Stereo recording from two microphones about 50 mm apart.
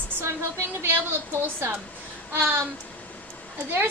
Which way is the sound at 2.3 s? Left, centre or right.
Right.